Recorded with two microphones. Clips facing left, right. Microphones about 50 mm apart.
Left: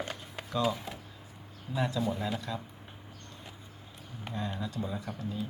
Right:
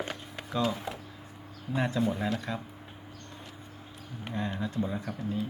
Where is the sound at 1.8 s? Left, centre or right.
Right.